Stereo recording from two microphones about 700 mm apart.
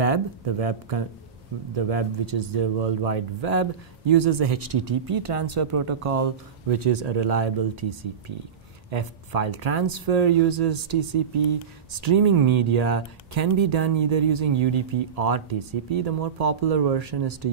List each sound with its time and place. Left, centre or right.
0.0 s speech: right